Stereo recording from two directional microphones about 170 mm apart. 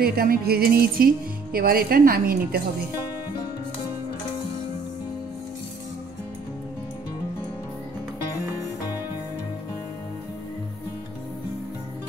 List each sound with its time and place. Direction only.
0.0 s speech: 60° right (ahead or behind)